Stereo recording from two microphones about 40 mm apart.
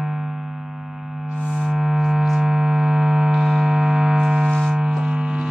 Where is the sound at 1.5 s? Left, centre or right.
Centre.